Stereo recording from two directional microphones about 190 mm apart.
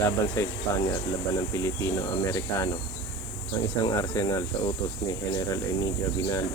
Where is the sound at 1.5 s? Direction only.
15° left (ahead or behind).